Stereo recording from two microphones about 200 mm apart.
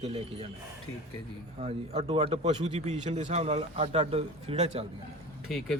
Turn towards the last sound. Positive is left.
turn(degrees=0)  # may be behind; listen again after turning